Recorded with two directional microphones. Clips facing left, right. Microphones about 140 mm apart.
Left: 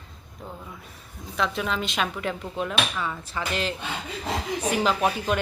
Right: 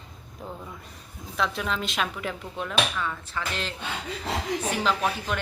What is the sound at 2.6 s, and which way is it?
Speech, 10° left (ahead or behind).